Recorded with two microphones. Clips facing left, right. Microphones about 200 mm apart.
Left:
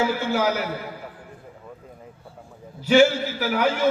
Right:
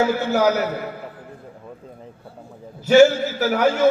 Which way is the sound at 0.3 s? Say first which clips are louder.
Right 4 dB; 45° right (ahead or behind).